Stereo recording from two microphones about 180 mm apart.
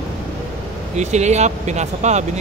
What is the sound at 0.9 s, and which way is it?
Speech, 40° right (ahead or behind).